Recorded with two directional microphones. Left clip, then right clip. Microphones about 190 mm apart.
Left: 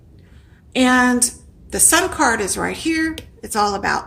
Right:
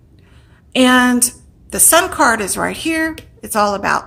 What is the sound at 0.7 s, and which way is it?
A woman's voice, 35° right (ahead or behind).